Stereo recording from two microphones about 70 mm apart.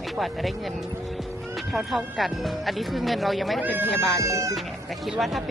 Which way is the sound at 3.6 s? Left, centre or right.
Right.